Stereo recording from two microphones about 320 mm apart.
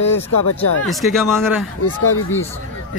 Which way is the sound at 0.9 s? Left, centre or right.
Centre.